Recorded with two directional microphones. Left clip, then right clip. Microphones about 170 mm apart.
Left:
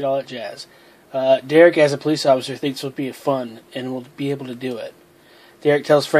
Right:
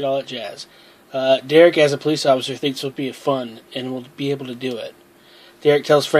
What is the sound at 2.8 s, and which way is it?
Speech, 5° right (ahead or behind).